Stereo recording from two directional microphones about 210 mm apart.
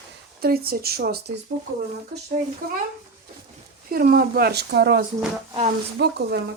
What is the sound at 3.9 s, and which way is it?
Speech, 45° right (ahead or behind).